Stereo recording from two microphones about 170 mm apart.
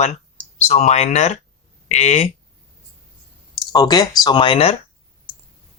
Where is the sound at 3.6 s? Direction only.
25° left (ahead or behind).